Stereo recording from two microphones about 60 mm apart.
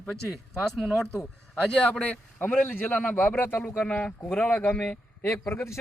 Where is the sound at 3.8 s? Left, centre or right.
Left.